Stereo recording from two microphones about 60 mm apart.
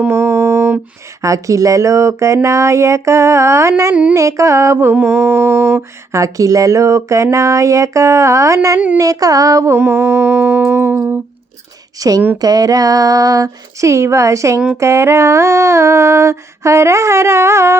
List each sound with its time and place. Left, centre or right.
0.1 s music: right
1.2 s speech: right
4.9 s humming: right
6.1 s speech: right
9.0 s a sound: right
9.7 s humming: right
11.9 s speech: right
12.4 s a sound: right